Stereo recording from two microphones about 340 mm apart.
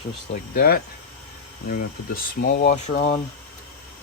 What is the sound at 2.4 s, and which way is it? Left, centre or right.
Speech, left.